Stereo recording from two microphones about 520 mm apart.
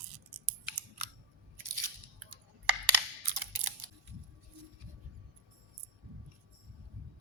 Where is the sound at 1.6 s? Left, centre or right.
Right.